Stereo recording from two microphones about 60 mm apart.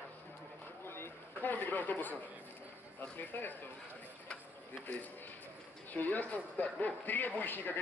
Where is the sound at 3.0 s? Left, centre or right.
Left.